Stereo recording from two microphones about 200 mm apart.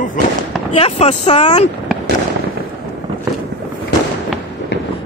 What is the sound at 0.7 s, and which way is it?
Speech, 30° left (ahead or behind).